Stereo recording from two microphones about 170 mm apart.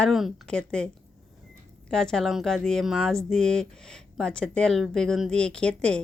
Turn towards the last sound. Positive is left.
turn(degrees=5)  # may be behind; listen again after turning